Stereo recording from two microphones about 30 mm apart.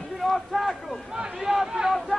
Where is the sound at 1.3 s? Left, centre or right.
Centre.